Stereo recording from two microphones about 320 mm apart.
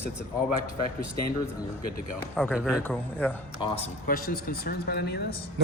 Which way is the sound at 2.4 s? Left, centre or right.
Centre.